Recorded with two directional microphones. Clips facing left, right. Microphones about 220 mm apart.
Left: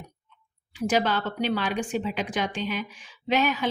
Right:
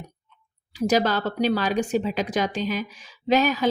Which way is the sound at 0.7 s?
40° right (ahead or behind).